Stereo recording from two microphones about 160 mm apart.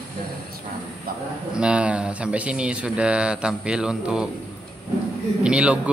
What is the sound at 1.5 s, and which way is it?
Speech, 5° right (ahead or behind).